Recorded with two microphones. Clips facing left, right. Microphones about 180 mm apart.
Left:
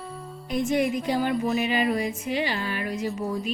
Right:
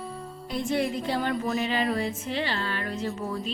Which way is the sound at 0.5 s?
20° left (ahead or behind).